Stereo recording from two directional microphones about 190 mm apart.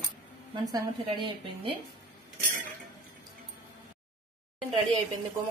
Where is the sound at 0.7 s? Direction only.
20° right (ahead or behind).